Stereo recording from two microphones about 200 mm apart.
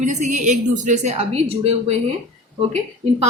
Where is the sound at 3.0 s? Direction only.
35° right (ahead or behind).